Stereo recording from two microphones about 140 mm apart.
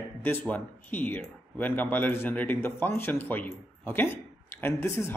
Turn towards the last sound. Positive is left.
turn(degrees=15)  # may be behind; listen again after turning